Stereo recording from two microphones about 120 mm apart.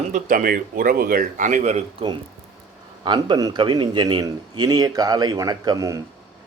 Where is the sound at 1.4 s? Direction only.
90° right.